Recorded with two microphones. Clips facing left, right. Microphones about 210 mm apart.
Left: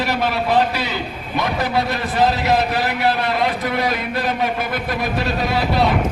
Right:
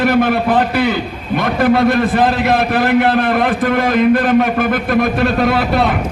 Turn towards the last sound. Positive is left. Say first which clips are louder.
# right 4 dB
turn(degrees=-50)  # may be behind; listen again after turning